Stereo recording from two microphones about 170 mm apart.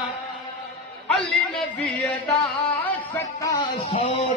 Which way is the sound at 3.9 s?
35° left (ahead or behind).